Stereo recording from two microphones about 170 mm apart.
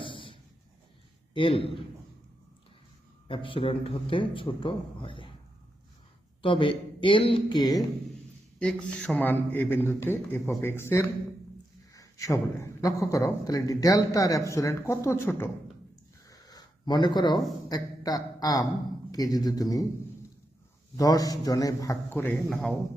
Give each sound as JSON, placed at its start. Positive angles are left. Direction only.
{"t": 0.0, "sound": "a sound", "side_deg": 30}
{"t": 1.3, "sound": "a man's voice", "side_deg": 30}
{"t": 3.2, "sound": "a man's voice", "side_deg": 30}
{"t": 6.4, "sound": "a man's voice", "side_deg": 30}
{"t": 8.5, "sound": "a man's voice", "side_deg": 5}
{"t": 16.2, "sound": "a sound", "side_deg": 20}
{"t": 17.7, "sound": "a man's voice", "side_deg": 25}
{"t": 20.9, "sound": "a man's voice", "side_deg": 20}
{"t": 22.4, "sound": "a man's voice", "side_deg": 0}